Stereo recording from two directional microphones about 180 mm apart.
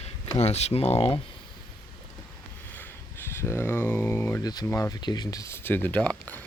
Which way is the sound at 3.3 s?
15° left (ahead or behind).